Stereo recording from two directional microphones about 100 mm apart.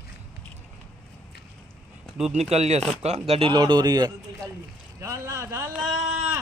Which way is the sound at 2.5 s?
90° right.